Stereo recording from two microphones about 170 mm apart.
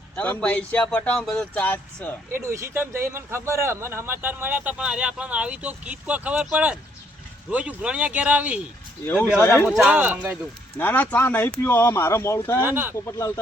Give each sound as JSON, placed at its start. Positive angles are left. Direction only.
{"t": 0.2, "sound": "speech", "side_deg": 10}
{"t": 2.3, "sound": "speech", "side_deg": -15}
{"t": 9.0, "sound": "speech", "side_deg": 10}
{"t": 9.6, "sound": "speech", "side_deg": -5}
{"t": 10.8, "sound": "speech", "side_deg": 10}
{"t": 12.6, "sound": "speech", "side_deg": -15}
{"t": 13.1, "sound": "speech", "side_deg": 15}